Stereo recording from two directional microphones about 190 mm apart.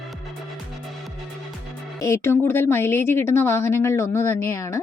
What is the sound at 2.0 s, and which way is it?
A woman's voice, 15° left (ahead or behind).